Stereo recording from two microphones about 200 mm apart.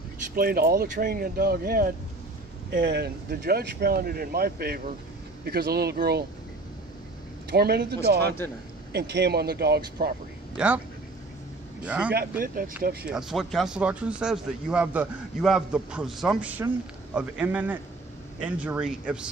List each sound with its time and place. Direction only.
0.4 s speech: 50° right (ahead or behind)
2.8 s speech: 55° right (ahead or behind)
7.5 s speech: 55° right (ahead or behind)
10.6 s speech: 5° right (ahead or behind)
11.8 s speech: 5° right (ahead or behind)
12.1 s speech: 45° right (ahead or behind)
13.1 s speech: centre (ahead or behind)